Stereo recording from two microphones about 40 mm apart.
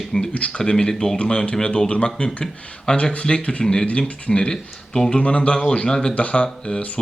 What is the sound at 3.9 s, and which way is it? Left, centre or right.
Speech, left.